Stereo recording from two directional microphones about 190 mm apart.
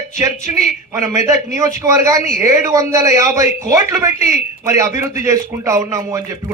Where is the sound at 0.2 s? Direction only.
15° right (ahead or behind).